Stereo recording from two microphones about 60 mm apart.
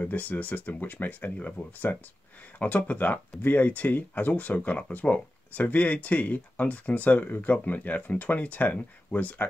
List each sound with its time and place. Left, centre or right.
0.0 s speech: left